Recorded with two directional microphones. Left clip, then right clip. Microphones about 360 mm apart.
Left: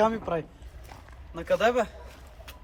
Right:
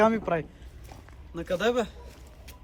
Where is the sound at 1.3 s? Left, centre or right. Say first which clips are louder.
Left 3 dB; left.